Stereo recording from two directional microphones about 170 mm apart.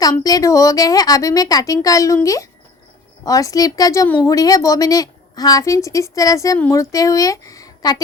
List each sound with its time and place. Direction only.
0.0 s a woman's voice: 20° left (ahead or behind)